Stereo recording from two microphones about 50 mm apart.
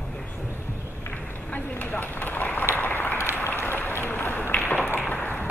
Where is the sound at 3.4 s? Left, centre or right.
Left.